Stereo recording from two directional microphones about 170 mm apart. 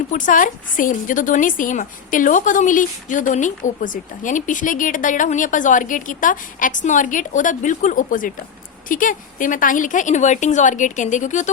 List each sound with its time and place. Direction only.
0.1 s a woman's voice: 50° left (ahead or behind)